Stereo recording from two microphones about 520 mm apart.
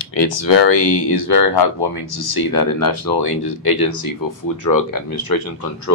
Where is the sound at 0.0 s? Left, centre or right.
Left.